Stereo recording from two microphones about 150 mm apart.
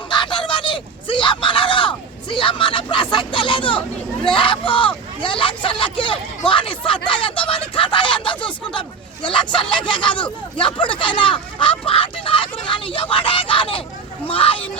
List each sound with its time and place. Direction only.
0.1 s a sound: 30° left (ahead or behind)
4.3 s speech: 35° left (ahead or behind)
10.1 s speech: 10° left (ahead or behind)
10.6 s speech: 35° left (ahead or behind)